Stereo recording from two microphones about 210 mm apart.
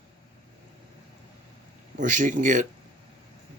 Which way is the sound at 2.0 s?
40° right (ahead or behind).